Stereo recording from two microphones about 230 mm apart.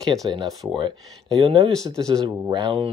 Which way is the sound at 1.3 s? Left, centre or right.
Right.